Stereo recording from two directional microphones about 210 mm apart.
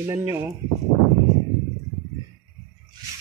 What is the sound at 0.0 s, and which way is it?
Speech, 15° right (ahead or behind).